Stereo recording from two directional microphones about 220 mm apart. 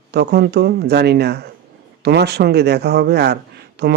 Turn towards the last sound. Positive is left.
turn(degrees=-50)  # may be behind; listen again after turning